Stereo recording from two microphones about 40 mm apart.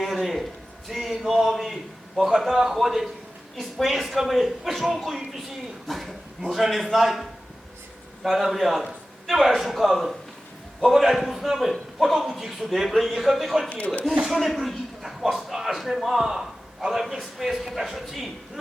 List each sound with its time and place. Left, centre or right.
0.0 s a sound: centre
2.7 s a man's voice: centre
13.7 s speech: left
14.3 s a man's voice: centre